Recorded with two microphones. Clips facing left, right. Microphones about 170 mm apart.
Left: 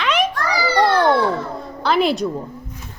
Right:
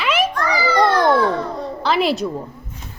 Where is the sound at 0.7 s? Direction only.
35° left (ahead or behind).